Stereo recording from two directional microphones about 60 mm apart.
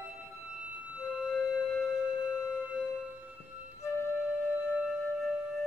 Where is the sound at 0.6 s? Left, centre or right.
Right.